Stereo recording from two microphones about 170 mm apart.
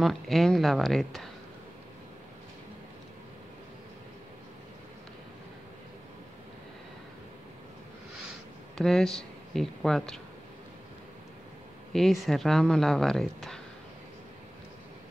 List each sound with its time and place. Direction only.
0.0 s speech: centre (ahead or behind)
8.7 s speech: 5° left (ahead or behind)
11.9 s speech: centre (ahead or behind)